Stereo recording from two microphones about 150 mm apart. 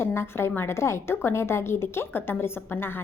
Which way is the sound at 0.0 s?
15° left (ahead or behind).